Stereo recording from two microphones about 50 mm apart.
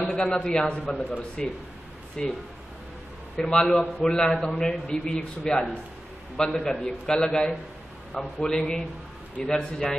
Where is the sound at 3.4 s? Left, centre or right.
Centre.